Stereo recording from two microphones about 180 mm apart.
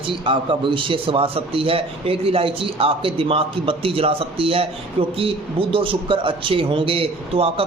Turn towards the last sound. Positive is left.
turn(degrees=-30)  # may be behind; listen again after turning